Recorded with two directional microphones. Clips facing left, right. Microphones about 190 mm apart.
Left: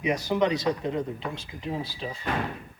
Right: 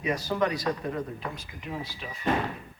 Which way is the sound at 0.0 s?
20° left (ahead or behind).